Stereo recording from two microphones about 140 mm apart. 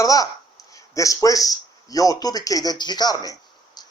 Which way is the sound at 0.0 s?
25° left (ahead or behind).